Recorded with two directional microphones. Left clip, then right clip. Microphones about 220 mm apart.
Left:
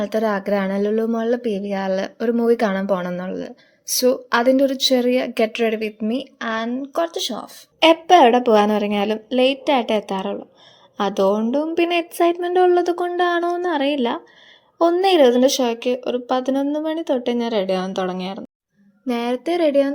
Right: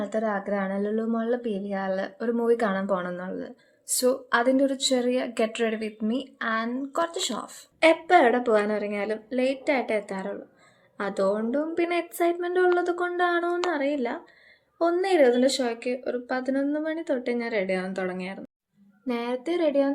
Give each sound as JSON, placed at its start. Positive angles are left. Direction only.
{"t": 0.0, "sound": "speech", "side_deg": 40}
{"t": 7.8, "sound": "speech", "side_deg": 30}